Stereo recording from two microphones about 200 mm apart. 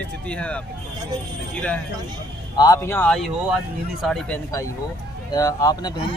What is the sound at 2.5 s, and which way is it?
Speech, 20° left (ahead or behind).